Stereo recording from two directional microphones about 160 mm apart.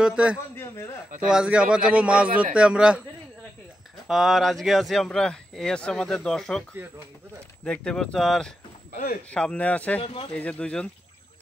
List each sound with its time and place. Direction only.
0.0 s speech: 5° right (ahead or behind)
4.1 s speech: centre (ahead or behind)
7.6 s speech: 5° left (ahead or behind)
8.9 s speech: 65° left (ahead or behind)
9.3 s speech: 5° left (ahead or behind)
10.0 s speech: 35° left (ahead or behind)
10.3 s speech: 10° left (ahead or behind)